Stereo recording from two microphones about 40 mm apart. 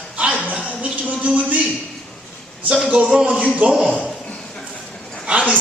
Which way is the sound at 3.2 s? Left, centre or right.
Right.